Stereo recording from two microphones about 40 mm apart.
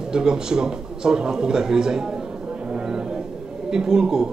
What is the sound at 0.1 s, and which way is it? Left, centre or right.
A man's voice, centre.